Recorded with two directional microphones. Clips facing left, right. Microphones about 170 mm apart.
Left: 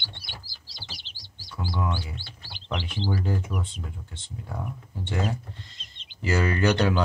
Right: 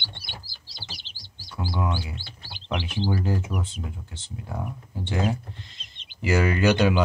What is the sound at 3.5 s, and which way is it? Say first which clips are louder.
Speech: right 2 dB; 15° right (ahead or behind).